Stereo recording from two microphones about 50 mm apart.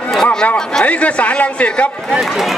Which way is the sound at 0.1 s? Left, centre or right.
Centre.